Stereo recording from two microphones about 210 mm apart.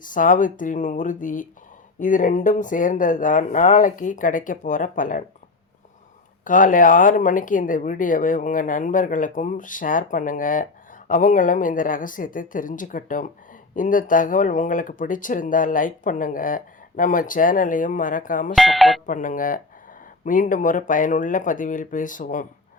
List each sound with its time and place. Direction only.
0.0 s speech: 40° left (ahead or behind)
6.4 s speech: 40° left (ahead or behind)
18.5 s speech: centre (ahead or behind)
19.0 s speech: 40° left (ahead or behind)